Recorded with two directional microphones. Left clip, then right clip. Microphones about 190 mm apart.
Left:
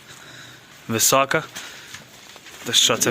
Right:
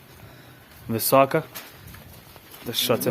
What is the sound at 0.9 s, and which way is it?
Speech, centre (ahead or behind).